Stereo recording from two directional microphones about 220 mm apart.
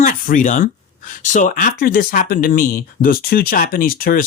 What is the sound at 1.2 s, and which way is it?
Speech, 35° left (ahead or behind).